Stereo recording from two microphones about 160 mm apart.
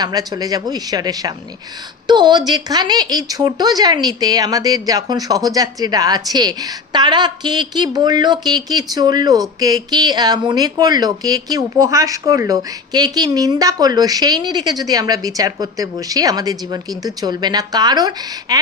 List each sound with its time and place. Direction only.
0.0 s speech: 25° right (ahead or behind)